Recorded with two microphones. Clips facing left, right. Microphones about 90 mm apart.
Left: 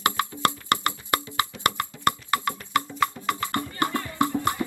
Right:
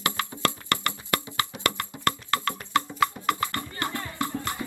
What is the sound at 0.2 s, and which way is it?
Music, 20° left (ahead or behind).